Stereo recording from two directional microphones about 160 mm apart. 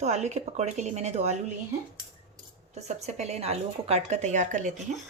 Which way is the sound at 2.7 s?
45° right (ahead or behind).